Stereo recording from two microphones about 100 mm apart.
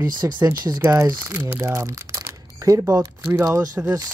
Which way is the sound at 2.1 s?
35° right (ahead or behind).